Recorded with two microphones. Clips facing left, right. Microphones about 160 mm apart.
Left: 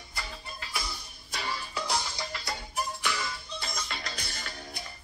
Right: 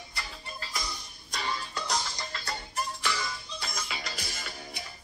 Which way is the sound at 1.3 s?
5° left (ahead or behind).